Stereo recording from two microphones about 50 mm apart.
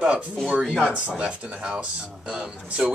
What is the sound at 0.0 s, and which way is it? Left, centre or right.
Speech, right.